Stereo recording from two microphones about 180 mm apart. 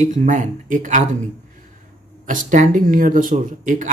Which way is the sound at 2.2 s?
45° right (ahead or behind).